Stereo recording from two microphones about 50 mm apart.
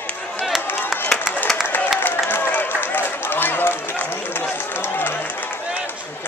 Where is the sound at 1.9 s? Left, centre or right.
Left.